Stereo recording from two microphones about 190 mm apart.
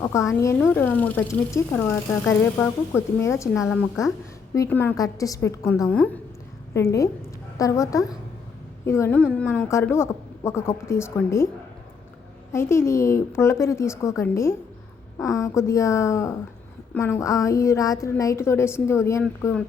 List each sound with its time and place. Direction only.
0.0 s speech: 15° left (ahead or behind)
3.6 s a woman's voice: centre (ahead or behind)
4.5 s speech: 15° left (ahead or behind)
12.5 s speech: 15° left (ahead or behind)